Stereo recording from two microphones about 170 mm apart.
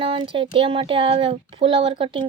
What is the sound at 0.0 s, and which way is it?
Speech, 30° right (ahead or behind).